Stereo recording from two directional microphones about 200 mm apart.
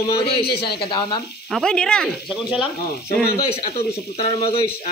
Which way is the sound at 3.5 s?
30° left (ahead or behind).